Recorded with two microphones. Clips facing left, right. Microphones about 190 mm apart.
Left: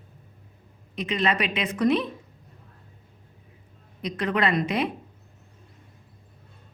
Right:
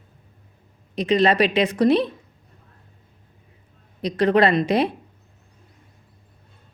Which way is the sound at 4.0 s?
35° right (ahead or behind).